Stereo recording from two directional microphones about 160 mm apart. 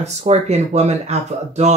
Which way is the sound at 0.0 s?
40° right (ahead or behind).